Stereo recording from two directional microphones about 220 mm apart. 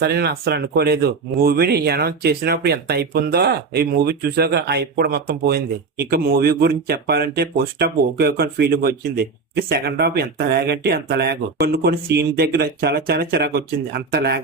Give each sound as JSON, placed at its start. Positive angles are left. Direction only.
{"t": 0.0, "sound": "speech", "side_deg": -45}